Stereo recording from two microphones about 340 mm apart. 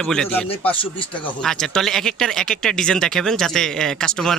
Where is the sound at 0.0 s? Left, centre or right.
Centre.